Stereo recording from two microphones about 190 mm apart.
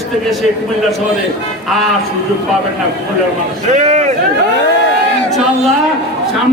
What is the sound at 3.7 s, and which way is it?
Speech, 40° right (ahead or behind).